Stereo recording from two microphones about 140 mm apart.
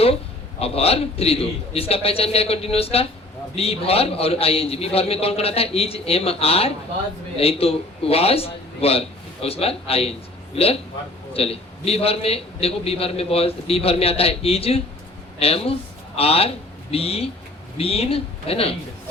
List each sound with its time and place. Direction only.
0.6 s a man's voice: 45° left (ahead or behind)